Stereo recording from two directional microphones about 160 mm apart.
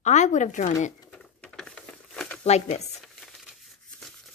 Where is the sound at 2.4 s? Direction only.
45° left (ahead or behind).